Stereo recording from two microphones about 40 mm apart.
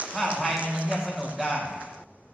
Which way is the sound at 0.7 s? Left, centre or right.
Right.